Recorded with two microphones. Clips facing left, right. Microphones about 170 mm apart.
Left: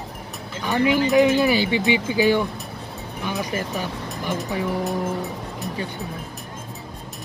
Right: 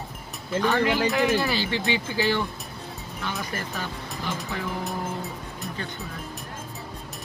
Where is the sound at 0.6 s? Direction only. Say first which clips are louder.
Left 4 dB; 15° left (ahead or behind).